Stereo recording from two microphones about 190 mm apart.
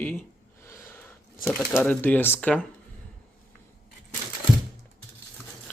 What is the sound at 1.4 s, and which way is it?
Speech, 5° left (ahead or behind).